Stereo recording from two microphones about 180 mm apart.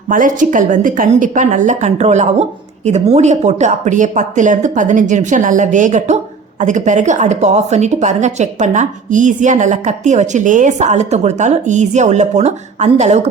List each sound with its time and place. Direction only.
0.1 s a woman's voice: 45° right (ahead or behind)